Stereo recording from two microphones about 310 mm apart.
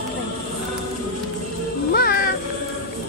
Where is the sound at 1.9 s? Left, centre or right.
Left.